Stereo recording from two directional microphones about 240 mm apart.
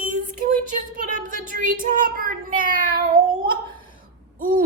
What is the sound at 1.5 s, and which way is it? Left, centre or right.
A woman's voice, right.